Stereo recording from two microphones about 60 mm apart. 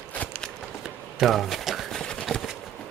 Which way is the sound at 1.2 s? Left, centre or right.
Centre.